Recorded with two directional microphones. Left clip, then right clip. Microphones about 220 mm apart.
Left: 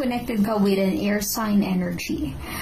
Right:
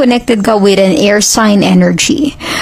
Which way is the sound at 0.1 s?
50° right (ahead or behind).